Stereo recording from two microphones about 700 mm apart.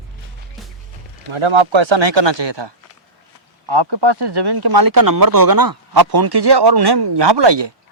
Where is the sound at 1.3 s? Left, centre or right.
Right.